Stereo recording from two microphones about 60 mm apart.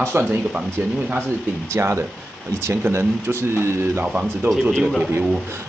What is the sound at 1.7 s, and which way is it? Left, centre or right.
Speech, right.